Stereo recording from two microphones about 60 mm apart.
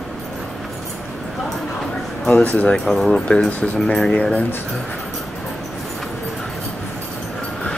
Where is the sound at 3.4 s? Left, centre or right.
Left.